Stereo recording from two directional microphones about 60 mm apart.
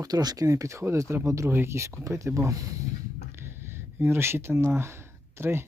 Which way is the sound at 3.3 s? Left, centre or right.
Right.